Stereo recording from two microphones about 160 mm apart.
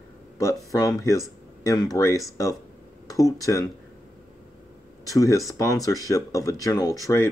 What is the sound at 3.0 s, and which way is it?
Speech, 20° left (ahead or behind).